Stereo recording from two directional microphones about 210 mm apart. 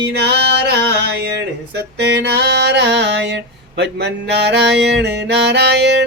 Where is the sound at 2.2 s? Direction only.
55° right (ahead or behind).